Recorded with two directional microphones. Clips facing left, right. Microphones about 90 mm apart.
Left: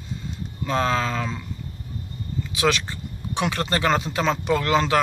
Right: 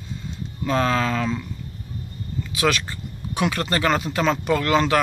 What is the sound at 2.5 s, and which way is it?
Speech, 25° left (ahead or behind).